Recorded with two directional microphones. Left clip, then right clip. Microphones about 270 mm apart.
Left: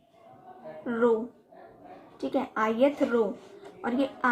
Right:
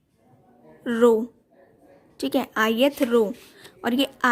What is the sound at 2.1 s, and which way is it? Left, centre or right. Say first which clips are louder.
A woman's voice: right 5 dB; right.